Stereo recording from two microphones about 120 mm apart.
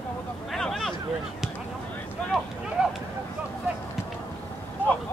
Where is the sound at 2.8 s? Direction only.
10° right (ahead or behind).